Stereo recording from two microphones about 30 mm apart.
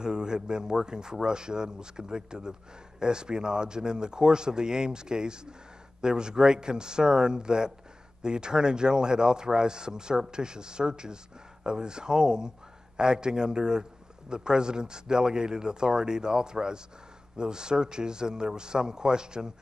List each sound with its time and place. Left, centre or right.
0.0 s speech: right